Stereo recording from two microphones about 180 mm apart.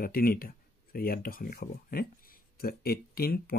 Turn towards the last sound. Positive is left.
turn(degrees=55)  # may be behind; listen again after turning